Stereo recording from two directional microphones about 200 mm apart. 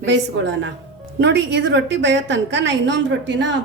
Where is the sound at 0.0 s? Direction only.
65° right (ahead or behind).